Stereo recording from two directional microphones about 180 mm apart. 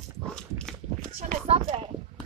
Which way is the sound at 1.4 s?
35° right (ahead or behind).